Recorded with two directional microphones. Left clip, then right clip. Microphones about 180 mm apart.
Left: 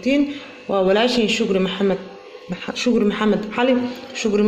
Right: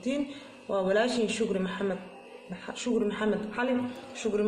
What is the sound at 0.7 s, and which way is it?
A man's voice, 25° left (ahead or behind).